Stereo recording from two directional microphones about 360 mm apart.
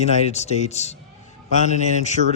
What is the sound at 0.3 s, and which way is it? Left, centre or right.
A man's voice, centre.